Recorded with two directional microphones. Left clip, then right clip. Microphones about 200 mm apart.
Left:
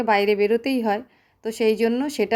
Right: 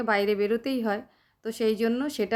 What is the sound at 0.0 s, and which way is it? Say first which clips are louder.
A woman's voice: left 6 dB; 15° left (ahead or behind).